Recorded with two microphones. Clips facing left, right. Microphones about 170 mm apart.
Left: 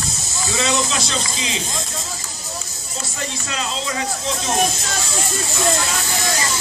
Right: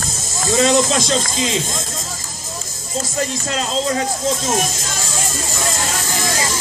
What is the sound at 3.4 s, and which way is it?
Speech, 45° right (ahead or behind).